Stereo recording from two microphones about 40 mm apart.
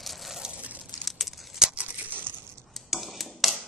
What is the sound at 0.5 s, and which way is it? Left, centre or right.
Crumpling, right.